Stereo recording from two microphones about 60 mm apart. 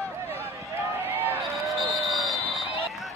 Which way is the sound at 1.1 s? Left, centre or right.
Right.